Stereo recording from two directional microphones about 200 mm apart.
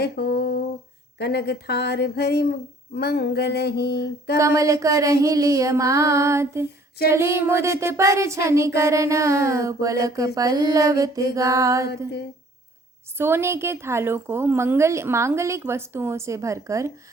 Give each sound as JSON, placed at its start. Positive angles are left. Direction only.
{"t": 0.0, "sound": "a sound", "side_deg": 55}
{"t": 4.4, "sound": "a woman's voice", "side_deg": -15}
{"t": 13.1, "sound": "a woman's voice", "side_deg": -10}